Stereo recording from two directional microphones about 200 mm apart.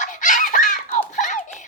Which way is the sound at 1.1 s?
40° left (ahead or behind).